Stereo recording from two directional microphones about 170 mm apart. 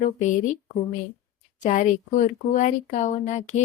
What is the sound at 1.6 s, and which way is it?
Speech, 45° left (ahead or behind).